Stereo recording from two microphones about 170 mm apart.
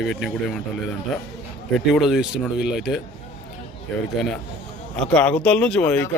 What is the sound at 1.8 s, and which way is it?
A man's voice, centre (ahead or behind).